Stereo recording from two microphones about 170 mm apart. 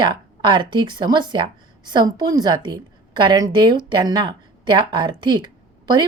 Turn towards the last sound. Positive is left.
turn(degrees=-25)  # may be behind; listen again after turning